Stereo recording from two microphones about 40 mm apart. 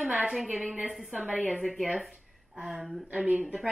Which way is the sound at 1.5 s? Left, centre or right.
Centre.